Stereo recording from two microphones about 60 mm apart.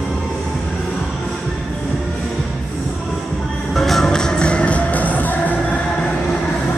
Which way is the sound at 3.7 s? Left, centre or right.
Centre.